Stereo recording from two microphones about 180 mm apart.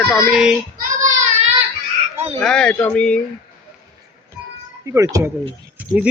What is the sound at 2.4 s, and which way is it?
Speech, 5° left (ahead or behind).